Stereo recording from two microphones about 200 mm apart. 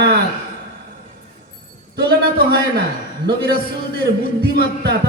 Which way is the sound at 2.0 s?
50° right (ahead or behind).